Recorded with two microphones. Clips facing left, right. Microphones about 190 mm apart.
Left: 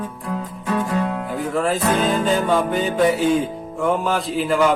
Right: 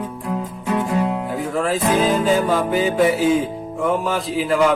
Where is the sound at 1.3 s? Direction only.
Centre (ahead or behind).